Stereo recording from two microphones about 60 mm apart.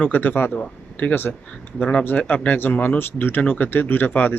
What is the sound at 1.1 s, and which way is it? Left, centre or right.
Speech, left.